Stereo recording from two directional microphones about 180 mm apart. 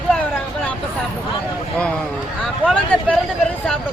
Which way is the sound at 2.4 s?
5° left (ahead or behind).